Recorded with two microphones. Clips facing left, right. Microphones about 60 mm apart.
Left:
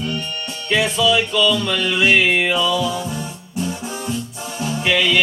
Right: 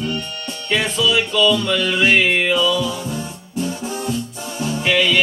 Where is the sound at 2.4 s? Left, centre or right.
Centre.